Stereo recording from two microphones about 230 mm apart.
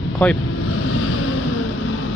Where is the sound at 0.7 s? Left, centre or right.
Left.